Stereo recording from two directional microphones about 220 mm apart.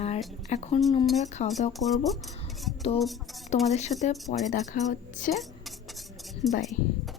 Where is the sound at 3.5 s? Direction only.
30° left (ahead or behind).